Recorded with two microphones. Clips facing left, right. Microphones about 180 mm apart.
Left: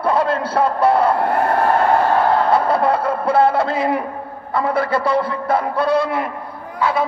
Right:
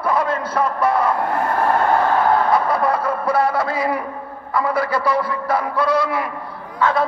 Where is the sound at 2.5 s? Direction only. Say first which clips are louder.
Left 2 dB; 30° left (ahead or behind).